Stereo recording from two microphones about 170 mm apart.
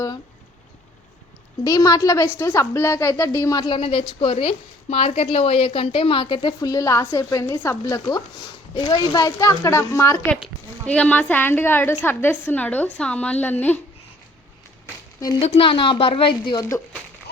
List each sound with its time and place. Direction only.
1.6 s a woman's voice: 20° left (ahead or behind)
15.4 s a woman's voice: 35° left (ahead or behind)